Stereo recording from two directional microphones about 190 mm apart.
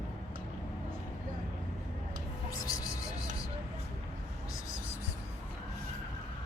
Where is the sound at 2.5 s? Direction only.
15° left (ahead or behind).